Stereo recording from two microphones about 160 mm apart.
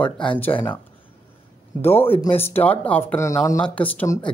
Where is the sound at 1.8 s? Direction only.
15° left (ahead or behind).